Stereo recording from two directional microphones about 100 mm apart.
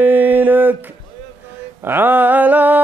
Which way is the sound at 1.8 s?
20° right (ahead or behind).